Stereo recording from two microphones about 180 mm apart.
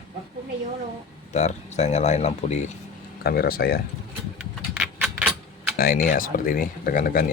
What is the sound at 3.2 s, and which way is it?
Speech, 55° left (ahead or behind).